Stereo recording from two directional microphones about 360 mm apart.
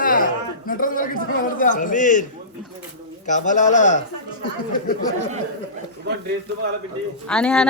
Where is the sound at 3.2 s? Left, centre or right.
Left.